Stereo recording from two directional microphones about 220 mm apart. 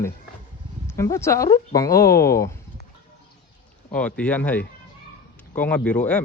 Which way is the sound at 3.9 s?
5° left (ahead or behind).